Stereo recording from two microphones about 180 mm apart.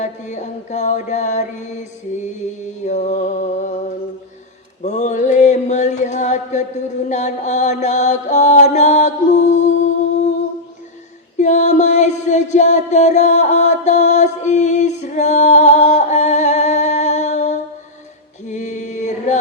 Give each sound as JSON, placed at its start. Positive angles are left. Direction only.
{"t": 0.0, "sound": "mantra", "side_deg": 40}
{"t": 4.8, "sound": "chant", "side_deg": 40}
{"t": 7.1, "sound": "mantra", "side_deg": 40}
{"t": 11.3, "sound": "music", "side_deg": 40}
{"t": 18.4, "sound": "chant", "side_deg": 40}